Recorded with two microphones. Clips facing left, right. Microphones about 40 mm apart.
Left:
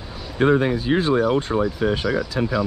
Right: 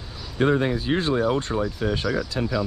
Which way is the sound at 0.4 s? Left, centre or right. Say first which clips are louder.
Left 3 dB; centre.